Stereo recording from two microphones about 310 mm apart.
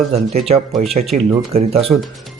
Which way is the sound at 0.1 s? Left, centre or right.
Centre.